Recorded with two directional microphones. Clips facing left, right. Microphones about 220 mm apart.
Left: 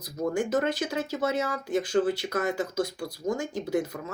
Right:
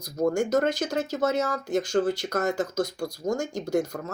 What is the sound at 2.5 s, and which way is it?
Speech, 5° left (ahead or behind).